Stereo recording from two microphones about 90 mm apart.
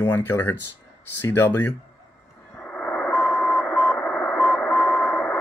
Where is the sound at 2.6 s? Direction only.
15° left (ahead or behind).